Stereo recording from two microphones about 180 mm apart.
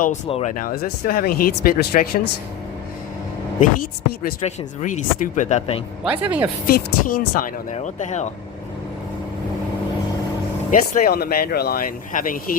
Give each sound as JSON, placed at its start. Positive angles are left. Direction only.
{"t": 0.3, "sound": "speech", "side_deg": 35}
{"t": 0.5, "sound": "speech", "side_deg": 50}
{"t": 4.4, "sound": "speech", "side_deg": 40}
{"t": 6.1, "sound": "speech", "side_deg": -10}
{"t": 6.7, "sound": "speech", "side_deg": 55}
{"t": 10.7, "sound": "speech", "side_deg": 45}